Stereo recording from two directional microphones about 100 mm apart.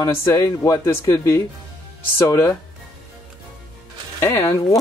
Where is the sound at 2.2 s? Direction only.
30° left (ahead or behind).